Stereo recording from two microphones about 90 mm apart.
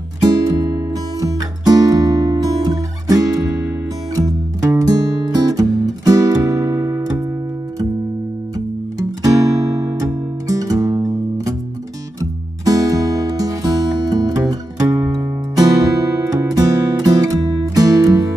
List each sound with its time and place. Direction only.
0.2 s music: 40° right (ahead or behind)
9.2 s music: 45° right (ahead or behind)